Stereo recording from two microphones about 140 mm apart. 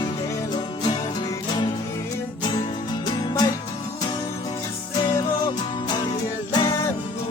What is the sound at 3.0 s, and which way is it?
Music, 30° left (ahead or behind).